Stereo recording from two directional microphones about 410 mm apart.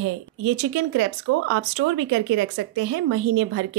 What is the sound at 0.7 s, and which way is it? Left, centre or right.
Speech, right.